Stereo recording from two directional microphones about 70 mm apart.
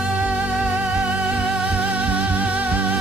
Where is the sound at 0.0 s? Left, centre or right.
Centre.